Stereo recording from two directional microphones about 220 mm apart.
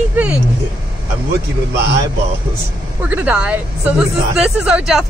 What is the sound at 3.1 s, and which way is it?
Speech, 5° right (ahead or behind).